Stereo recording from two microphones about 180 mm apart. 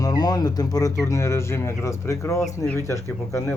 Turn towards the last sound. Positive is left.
turn(degrees=15)  # may be behind; listen again after turning